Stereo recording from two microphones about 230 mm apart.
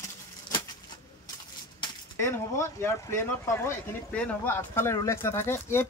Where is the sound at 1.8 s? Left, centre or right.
Centre.